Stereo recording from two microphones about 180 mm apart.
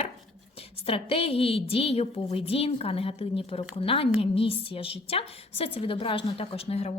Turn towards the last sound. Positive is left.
turn(degrees=35)  # may be behind; listen again after turning